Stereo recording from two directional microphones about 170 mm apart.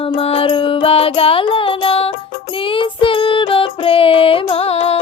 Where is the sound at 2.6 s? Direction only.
30° left (ahead or behind).